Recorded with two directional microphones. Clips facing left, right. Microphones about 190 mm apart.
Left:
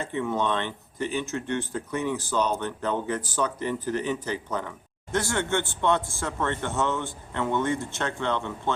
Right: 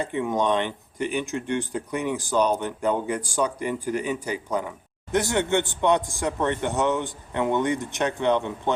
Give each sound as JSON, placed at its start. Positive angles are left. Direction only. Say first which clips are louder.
{"t": 0.0, "sound": "speech", "louder": "right 3 dB", "side_deg": -15}